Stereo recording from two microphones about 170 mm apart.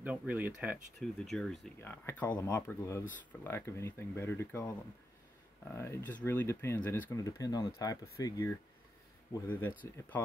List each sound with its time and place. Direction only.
0.0 s speech: 10° right (ahead or behind)
0.9 s speech: centre (ahead or behind)
1.8 s speech: 10° left (ahead or behind)
9.8 s speech: 10° left (ahead or behind)